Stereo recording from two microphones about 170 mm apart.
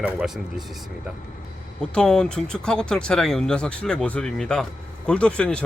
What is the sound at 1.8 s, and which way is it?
Speech, 5° left (ahead or behind).